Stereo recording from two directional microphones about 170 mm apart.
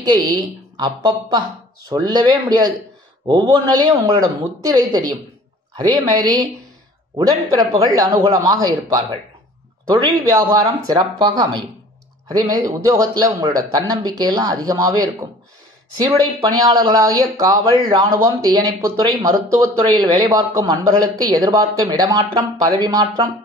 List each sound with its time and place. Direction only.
0.0 s speech: 25° right (ahead or behind)
10.3 s speech: 20° right (ahead or behind)